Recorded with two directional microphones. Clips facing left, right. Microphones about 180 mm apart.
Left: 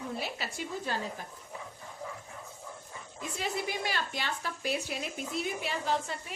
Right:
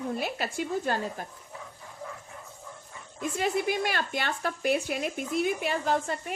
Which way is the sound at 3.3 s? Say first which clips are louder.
Right 7 dB; 55° right (ahead or behind).